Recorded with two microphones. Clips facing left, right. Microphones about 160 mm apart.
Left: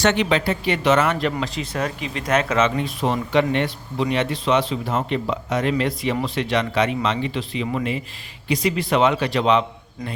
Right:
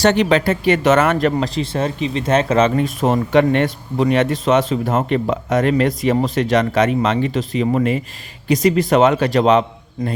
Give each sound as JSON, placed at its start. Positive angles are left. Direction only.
{"t": 0.0, "sound": "speech", "side_deg": -40}
{"t": 1.5, "sound": "speech", "side_deg": -25}